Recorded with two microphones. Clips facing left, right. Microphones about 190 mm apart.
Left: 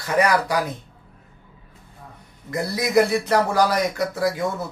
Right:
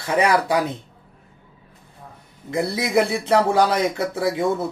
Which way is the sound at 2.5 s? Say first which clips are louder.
Even; 25° right (ahead or behind).